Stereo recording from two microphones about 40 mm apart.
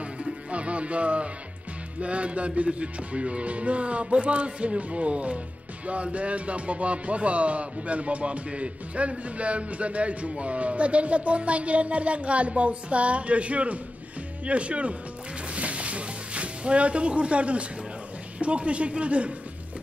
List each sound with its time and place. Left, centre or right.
0.0 s music: right
2.0 s speech: right
15.5 s music: right
18.4 s speech: right